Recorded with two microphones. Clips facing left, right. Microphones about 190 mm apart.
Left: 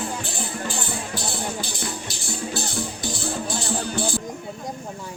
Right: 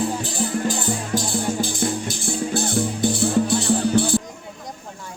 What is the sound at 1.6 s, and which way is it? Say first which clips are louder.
Music: right 8 dB; 50° right (ahead or behind).